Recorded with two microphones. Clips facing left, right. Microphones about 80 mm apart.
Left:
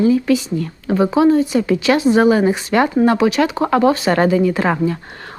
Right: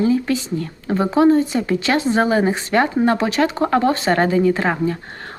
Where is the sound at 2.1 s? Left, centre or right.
Right.